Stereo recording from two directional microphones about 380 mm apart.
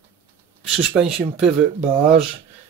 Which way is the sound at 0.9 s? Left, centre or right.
Centre.